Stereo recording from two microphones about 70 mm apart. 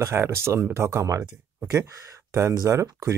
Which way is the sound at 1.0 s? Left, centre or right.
Right.